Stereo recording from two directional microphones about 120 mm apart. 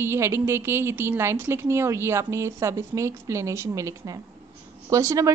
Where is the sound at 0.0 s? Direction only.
20° right (ahead or behind).